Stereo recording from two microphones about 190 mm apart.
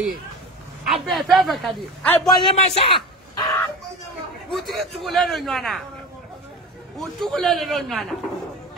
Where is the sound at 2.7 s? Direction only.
30° left (ahead or behind).